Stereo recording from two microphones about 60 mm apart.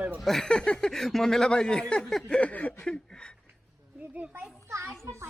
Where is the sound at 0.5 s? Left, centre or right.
Centre.